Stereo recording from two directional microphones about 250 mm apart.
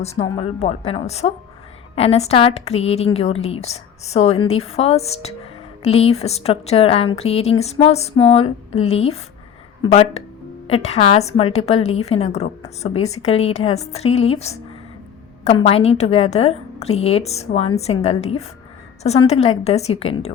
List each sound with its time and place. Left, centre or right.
0.0 s speech: left